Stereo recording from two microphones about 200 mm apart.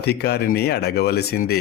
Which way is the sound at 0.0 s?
55° left (ahead or behind).